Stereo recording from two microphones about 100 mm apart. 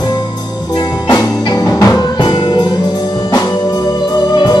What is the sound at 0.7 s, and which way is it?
Music, 40° left (ahead or behind).